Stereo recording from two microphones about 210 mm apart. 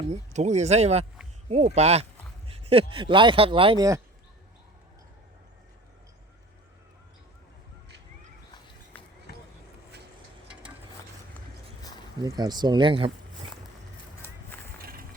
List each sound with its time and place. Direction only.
0.1 s speech: 35° right (ahead or behind); by 4.0 s 15° right (ahead or behind)
12.2 s speech: 20° right (ahead or behind)
14.8 s music: 45° right (ahead or behind)